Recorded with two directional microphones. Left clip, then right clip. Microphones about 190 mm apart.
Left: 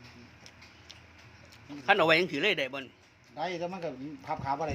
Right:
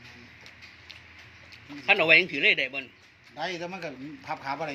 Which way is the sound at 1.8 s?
10° left (ahead or behind).